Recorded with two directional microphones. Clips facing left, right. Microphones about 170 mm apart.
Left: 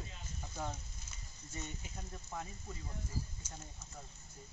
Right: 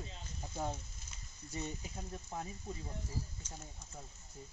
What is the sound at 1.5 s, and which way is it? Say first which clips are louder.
Speech: right 4 dB; 35° right (ahead or behind).